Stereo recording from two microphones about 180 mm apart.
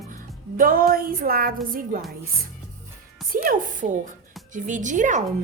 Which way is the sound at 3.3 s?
50° right (ahead or behind).